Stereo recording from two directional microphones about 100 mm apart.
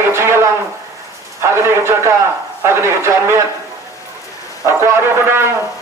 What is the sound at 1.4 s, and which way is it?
A man's voice, 25° right (ahead or behind).